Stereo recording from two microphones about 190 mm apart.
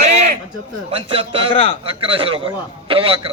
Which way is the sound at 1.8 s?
30° right (ahead or behind).